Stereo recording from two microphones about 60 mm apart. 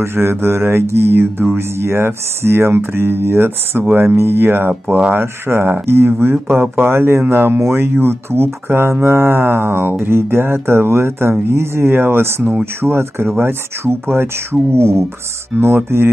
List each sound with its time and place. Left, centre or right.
0.0 s speech: right